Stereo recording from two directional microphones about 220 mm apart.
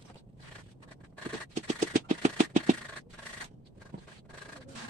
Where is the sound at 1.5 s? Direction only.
35° right (ahead or behind).